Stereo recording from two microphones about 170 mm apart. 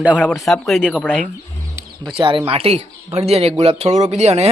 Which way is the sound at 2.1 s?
30° right (ahead or behind).